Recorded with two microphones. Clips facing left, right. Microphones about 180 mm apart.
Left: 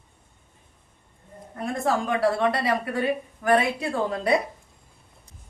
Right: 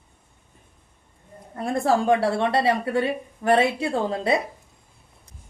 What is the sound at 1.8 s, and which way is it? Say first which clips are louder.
A woman's voice: right 3 dB; 30° right (ahead or behind).